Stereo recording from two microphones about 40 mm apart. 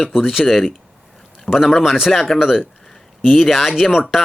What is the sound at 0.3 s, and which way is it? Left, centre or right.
Speech, centre.